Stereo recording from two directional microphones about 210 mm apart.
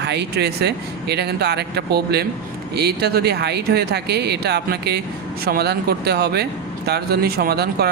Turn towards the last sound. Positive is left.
turn(degrees=-50)  # may be behind; listen again after turning